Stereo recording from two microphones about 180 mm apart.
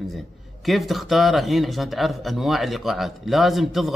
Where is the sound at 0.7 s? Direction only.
Centre (ahead or behind).